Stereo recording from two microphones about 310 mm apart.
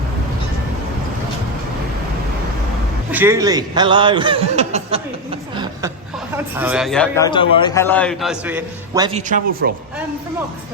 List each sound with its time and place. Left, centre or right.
3.1 s a man's voice: centre
6.3 s a man's voice: centre
7.3 s a man's voice: centre
9.0 s speech: right